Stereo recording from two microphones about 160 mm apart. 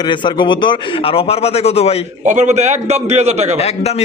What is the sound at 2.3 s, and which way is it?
A man's voice, 50° right (ahead or behind).